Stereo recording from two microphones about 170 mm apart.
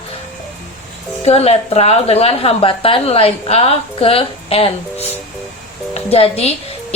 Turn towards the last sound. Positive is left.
turn(degrees=40)  # may be behind; listen again after turning